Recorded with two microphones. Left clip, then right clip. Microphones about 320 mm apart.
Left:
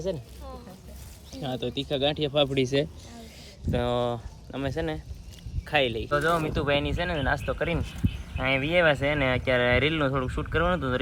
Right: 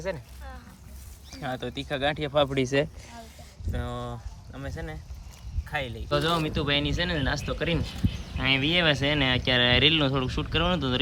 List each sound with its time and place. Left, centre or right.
1.4 s speech: centre
3.7 s speech: centre